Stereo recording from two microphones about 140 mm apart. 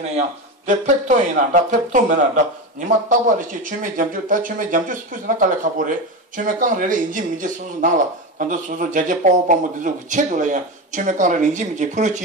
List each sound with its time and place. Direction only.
0.7 s speech: 60° right (ahead or behind)